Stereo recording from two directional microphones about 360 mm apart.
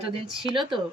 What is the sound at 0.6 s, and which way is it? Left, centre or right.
Speech, centre.